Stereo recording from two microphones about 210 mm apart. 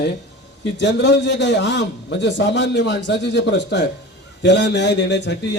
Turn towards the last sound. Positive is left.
turn(degrees=55)  # may be behind; listen again after turning